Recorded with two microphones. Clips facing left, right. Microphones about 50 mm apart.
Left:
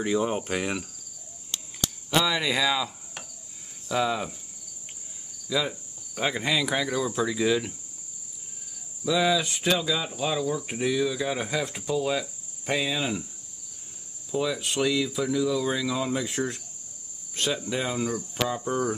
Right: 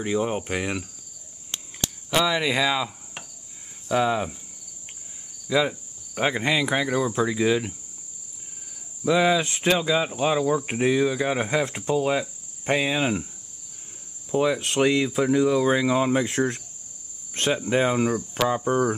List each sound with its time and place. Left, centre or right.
0.0 s speech: centre
2.0 s cricket: centre
5.5 s cricket: right
9.0 s speech: right
14.3 s speech: right
14.6 s speech: right
17.3 s cricket: right
17.6 s speech: right
18.6 s cricket: right